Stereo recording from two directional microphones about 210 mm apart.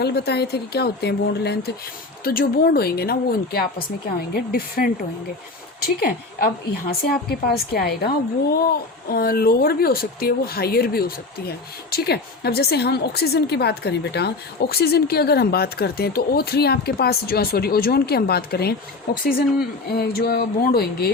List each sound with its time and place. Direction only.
0.0 s speech: 50° left (ahead or behind)